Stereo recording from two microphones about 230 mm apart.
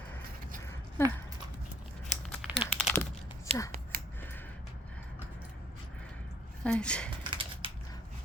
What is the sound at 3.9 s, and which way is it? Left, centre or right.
Scissors, right.